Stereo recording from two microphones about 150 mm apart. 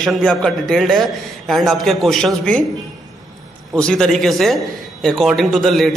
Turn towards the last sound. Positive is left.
turn(degrees=0)  # may be behind; listen again after turning